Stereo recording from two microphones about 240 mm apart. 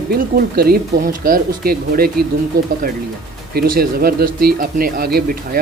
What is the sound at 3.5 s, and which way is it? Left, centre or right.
Speech, right.